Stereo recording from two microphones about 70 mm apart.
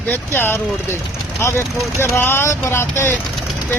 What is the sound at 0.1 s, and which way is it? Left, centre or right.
Speech, left.